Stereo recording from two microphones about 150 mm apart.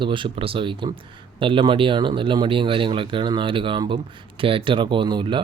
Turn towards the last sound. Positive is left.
turn(degrees=-30)  # may be behind; listen again after turning